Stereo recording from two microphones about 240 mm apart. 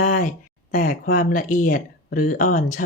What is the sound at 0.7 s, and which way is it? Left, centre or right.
Speech, left.